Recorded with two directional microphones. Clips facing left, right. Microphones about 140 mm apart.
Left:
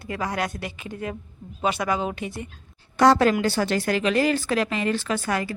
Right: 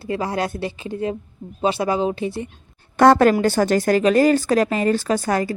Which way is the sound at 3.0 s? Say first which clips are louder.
Right 4 dB; 50° right (ahead or behind).